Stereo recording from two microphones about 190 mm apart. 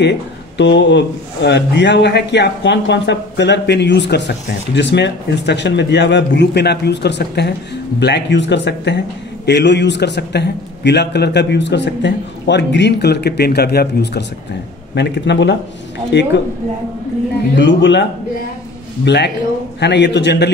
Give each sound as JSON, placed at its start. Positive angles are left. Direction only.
{"t": 0.6, "sound": "speech", "side_deg": 70}
{"t": 17.6, "sound": "speech", "side_deg": 65}
{"t": 19.0, "sound": "speech", "side_deg": 65}